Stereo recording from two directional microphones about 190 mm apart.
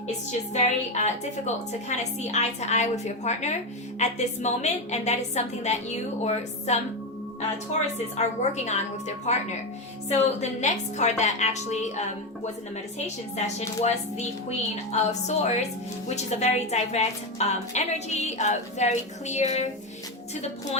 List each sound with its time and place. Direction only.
0.5 s a woman's voice: 35° left (ahead or behind)
13.3 s a woman's voice: 35° left (ahead or behind)